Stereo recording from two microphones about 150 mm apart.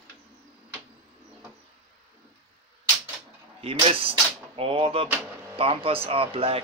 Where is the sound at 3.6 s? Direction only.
40° right (ahead or behind).